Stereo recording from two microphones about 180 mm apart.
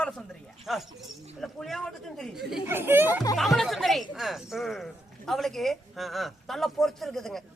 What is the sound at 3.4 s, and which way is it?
Speech, centre (ahead or behind).